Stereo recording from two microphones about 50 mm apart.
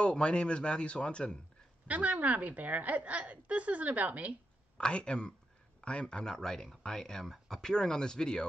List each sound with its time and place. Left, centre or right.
0.0 s a man's voice: centre
1.9 s a woman's voice: right
4.7 s a man's voice: centre